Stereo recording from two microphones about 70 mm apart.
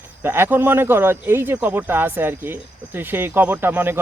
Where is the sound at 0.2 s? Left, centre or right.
Right.